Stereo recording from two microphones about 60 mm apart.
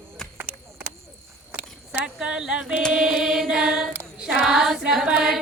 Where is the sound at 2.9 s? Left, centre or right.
Centre.